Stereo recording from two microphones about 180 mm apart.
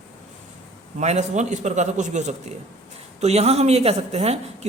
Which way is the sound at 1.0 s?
40° right (ahead or behind).